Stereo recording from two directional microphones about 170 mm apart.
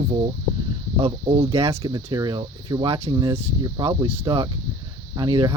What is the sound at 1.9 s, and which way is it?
Speech, 25° right (ahead or behind).